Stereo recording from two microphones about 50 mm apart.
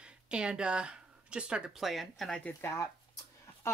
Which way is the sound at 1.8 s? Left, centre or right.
Centre.